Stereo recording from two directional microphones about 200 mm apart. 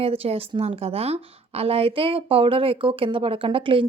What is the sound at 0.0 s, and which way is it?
A woman's voice, 30° right (ahead or behind).